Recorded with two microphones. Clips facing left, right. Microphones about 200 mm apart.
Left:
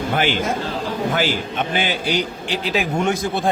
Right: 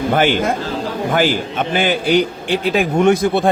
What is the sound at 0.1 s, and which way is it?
Speech, 50° right (ahead or behind).